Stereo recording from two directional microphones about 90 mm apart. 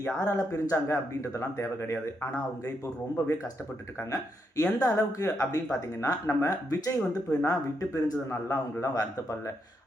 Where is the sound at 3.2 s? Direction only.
35° left (ahead or behind).